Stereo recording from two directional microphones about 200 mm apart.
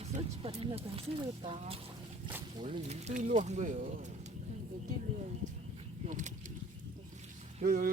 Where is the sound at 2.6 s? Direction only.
30° right (ahead or behind).